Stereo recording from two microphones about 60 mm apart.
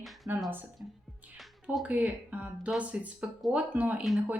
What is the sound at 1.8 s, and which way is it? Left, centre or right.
A woman's voice, right.